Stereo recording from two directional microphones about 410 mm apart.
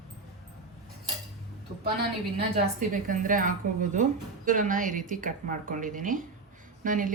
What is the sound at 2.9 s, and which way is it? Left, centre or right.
A woman's voice, centre.